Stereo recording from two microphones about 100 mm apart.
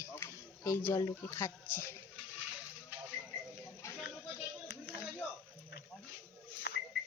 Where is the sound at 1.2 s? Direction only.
30° left (ahead or behind).